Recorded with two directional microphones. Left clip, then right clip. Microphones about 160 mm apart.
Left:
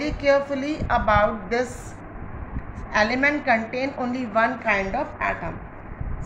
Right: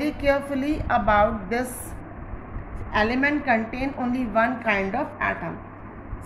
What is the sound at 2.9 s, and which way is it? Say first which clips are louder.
A woman's voice: left 2 dB; 20° right (ahead or behind).